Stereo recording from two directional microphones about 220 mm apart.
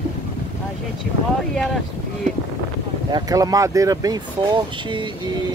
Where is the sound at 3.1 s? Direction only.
15° right (ahead or behind).